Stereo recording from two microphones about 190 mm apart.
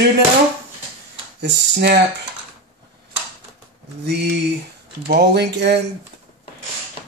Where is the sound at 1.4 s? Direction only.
60° right (ahead or behind).